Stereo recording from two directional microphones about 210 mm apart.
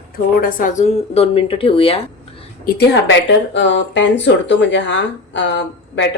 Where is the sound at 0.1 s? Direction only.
40° left (ahead or behind); by 2.0 s 25° left (ahead or behind).